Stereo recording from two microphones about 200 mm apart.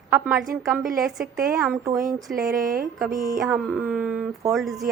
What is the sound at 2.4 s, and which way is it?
Speech, 45° right (ahead or behind).